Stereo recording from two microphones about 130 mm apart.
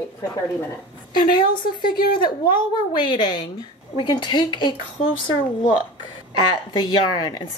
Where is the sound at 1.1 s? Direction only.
35° left (ahead or behind).